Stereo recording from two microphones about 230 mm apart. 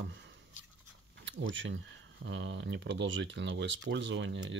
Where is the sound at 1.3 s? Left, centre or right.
Right.